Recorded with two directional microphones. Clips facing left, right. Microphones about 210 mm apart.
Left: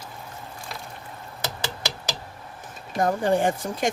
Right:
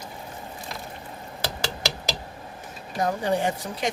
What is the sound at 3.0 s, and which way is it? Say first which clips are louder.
Speech: left 3 dB; 50° left (ahead or behind).